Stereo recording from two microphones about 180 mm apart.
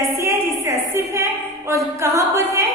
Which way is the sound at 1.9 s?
15° right (ahead or behind).